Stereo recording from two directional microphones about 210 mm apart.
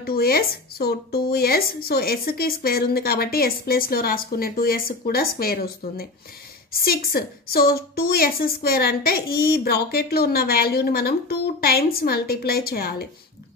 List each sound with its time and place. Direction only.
0.0 s a woman's voice: 45° left (ahead or behind)